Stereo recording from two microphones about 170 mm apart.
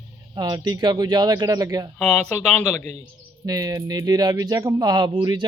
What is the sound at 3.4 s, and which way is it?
Speech, 25° right (ahead or behind).